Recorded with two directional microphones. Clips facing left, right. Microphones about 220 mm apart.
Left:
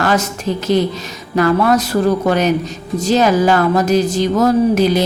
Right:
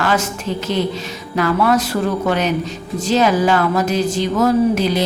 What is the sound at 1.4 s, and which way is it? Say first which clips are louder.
A woman's voice: left 3 dB; 40° left (ahead or behind).